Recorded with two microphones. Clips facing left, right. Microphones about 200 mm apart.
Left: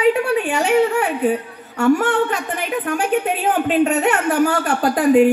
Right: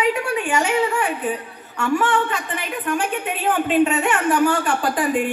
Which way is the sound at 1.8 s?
40° left (ahead or behind).